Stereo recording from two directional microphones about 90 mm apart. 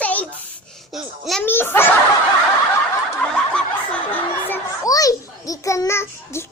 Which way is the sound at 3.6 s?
10° left (ahead or behind).